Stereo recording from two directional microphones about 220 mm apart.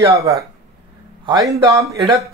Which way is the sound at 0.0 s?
15° right (ahead or behind).